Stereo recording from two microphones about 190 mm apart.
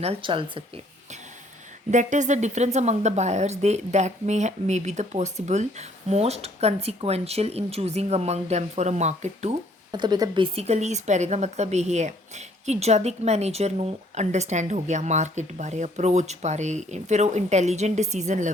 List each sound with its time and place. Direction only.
0.0 s speech: 30° right (ahead or behind)
1.9 s speech: 40° right (ahead or behind)
9.9 s speech: 20° right (ahead or behind); by 18.5 s 40° right (ahead or behind)